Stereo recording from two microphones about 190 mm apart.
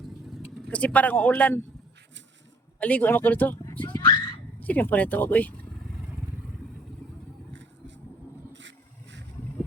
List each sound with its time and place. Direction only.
0.7 s speech: 5° left (ahead or behind)
2.8 s speech: 10° left (ahead or behind)
7.5 s vehicle: 70° right (ahead or behind)